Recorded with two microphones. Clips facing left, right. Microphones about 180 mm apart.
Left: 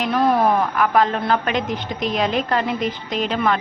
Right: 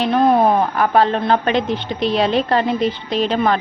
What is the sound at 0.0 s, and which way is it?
A woman's voice, 25° right (ahead or behind).